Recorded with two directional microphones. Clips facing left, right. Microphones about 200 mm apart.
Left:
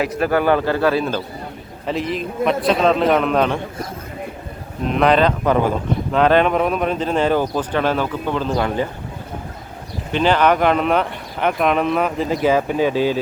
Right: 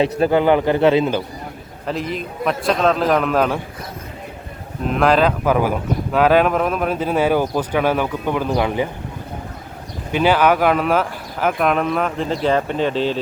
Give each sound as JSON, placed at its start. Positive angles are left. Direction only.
{"t": 0.0, "sound": "speech", "side_deg": -25}
{"t": 1.9, "sound": "speech", "side_deg": 0}
{"t": 4.9, "sound": "a man's voice", "side_deg": 0}
{"t": 10.1, "sound": "speech", "side_deg": -10}